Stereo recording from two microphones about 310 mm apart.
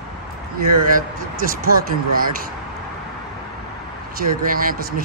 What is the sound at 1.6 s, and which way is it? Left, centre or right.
Speech, right.